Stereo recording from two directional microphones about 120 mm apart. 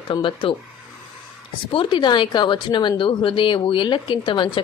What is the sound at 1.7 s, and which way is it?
A woman's voice, 45° left (ahead or behind).